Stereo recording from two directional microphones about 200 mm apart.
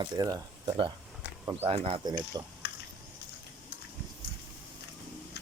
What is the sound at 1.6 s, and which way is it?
Speech, 30° right (ahead or behind).